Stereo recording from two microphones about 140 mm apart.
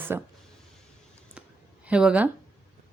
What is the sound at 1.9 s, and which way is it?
Speech, 5° right (ahead or behind).